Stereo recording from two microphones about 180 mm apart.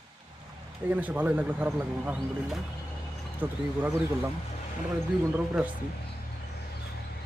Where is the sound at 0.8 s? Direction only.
10° right (ahead or behind).